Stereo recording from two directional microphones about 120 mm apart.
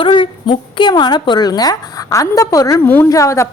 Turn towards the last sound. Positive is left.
turn(degrees=25)  # may be behind; listen again after turning